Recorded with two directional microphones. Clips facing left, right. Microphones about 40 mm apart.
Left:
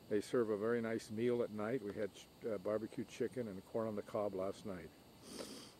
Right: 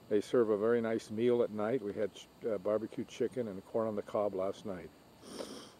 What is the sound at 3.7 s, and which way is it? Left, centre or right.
Speech, right.